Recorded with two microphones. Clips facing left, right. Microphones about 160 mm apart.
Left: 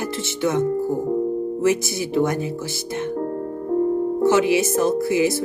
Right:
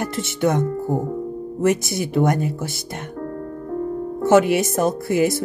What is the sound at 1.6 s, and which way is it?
Speech, 55° right (ahead or behind).